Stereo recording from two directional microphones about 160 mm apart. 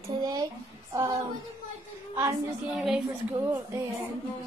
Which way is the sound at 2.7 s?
Centre (ahead or behind).